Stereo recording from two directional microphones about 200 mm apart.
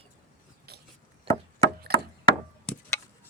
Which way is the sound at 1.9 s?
50° right (ahead or behind).